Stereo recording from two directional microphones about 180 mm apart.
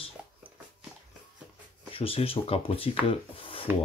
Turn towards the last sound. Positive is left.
turn(degrees=30)  # may be behind; listen again after turning